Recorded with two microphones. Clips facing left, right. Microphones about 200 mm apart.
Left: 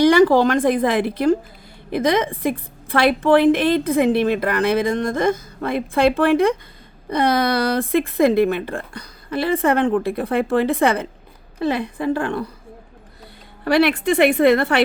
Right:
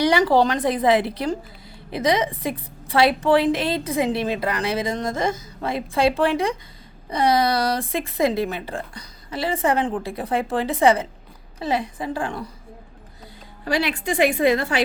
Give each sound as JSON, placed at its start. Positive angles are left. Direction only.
{"t": 0.0, "sound": "a woman's voice", "side_deg": 50}
{"t": 13.7, "sound": "a woman's voice", "side_deg": 60}